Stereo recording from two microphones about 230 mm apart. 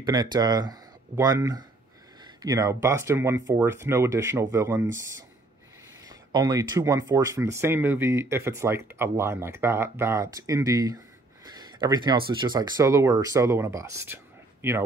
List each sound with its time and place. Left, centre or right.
0.0 s speech: centre
6.3 s speech: centre